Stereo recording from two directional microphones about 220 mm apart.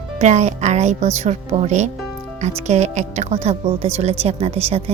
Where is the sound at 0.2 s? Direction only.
30° right (ahead or behind).